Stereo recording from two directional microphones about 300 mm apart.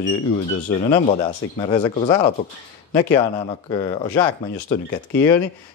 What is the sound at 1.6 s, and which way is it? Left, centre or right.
Speech, centre.